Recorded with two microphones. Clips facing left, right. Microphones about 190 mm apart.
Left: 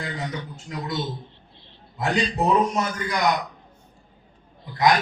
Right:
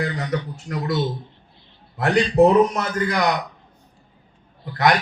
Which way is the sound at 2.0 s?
60° right (ahead or behind).